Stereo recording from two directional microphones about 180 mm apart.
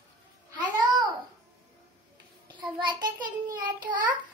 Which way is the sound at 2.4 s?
25° right (ahead or behind).